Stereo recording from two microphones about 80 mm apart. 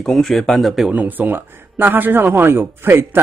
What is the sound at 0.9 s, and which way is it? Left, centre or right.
A man's voice, right.